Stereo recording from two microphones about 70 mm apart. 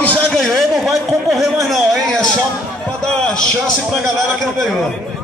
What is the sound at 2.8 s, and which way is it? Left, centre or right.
Music, centre.